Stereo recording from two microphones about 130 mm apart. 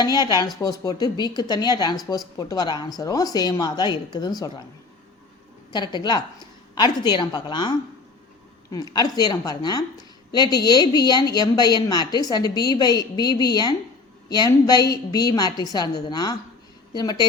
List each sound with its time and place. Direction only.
0.0 s speech: 30° left (ahead or behind)
5.7 s speech: 35° left (ahead or behind)